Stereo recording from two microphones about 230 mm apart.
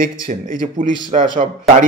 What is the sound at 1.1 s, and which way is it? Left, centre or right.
Speech, right.